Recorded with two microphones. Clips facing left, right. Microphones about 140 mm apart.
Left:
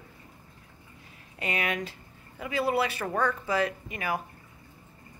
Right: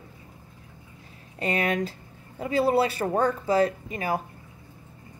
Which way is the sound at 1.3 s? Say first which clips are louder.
Right 5 dB; 35° right (ahead or behind).